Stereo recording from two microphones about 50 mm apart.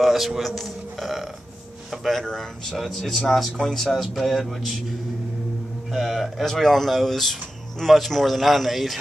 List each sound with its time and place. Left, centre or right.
0.0 s a man's voice: centre
5.9 s a man's voice: centre